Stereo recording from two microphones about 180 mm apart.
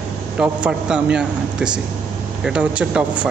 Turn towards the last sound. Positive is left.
turn(degrees=-5)  # may be behind; listen again after turning